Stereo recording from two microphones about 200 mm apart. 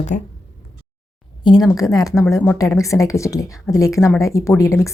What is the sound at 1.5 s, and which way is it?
Speech, 20° left (ahead or behind).